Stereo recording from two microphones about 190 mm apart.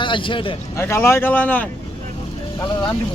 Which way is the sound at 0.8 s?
15° left (ahead or behind).